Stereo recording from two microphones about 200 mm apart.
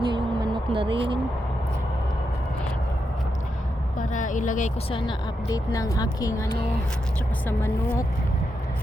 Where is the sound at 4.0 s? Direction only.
40° left (ahead or behind).